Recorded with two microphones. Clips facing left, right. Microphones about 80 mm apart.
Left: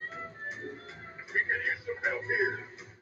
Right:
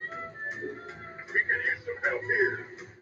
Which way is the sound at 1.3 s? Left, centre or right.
Right.